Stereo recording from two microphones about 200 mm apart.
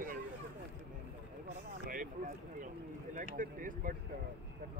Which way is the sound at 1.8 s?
40° right (ahead or behind).